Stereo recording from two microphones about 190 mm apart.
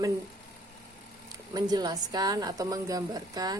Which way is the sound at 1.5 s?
20° right (ahead or behind).